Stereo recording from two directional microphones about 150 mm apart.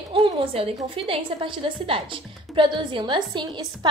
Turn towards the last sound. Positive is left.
turn(degrees=-30)  # may be behind; listen again after turning